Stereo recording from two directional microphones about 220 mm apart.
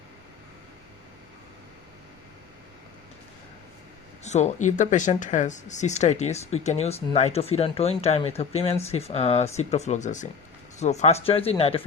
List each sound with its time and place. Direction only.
4.2 s speech: 30° left (ahead or behind)